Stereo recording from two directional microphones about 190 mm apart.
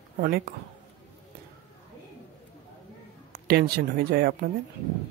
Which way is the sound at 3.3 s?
60° right (ahead or behind).